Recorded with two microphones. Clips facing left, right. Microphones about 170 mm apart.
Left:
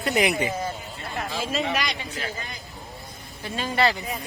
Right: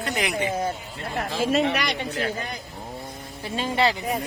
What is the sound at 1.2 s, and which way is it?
A man's voice, 55° right (ahead or behind).